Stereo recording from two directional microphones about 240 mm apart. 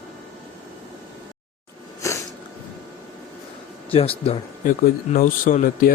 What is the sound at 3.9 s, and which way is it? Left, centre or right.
Speech, left.